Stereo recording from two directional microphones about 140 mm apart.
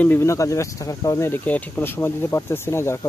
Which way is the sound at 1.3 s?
10° left (ahead or behind).